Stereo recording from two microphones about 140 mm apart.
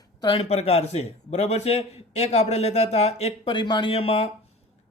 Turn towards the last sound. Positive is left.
turn(degrees=45)  # may be behind; listen again after turning